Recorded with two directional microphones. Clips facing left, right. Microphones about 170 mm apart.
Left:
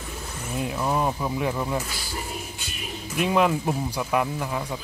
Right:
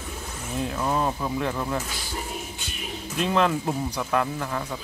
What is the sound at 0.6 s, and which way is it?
Speech, 10° left (ahead or behind).